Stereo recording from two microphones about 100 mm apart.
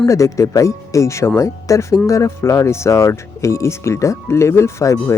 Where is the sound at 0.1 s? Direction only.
30° left (ahead or behind).